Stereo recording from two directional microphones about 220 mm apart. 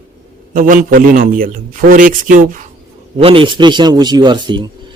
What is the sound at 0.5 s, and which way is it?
A man's voice, 40° right (ahead or behind).